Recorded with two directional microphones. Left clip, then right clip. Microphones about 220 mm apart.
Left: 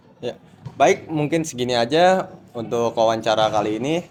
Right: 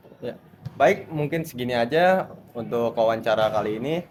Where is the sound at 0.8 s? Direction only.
25° left (ahead or behind).